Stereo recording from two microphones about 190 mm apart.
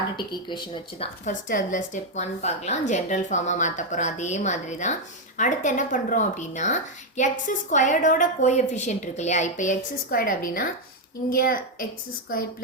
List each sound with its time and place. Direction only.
0.4 s a woman's voice: 25° left (ahead or behind); by 12.6 s 50° left (ahead or behind)